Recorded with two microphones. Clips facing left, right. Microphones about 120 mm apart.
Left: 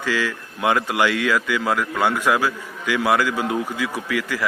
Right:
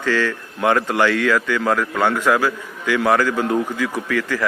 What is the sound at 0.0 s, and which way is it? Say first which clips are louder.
A man's voice: right 3 dB; 10° left (ahead or behind).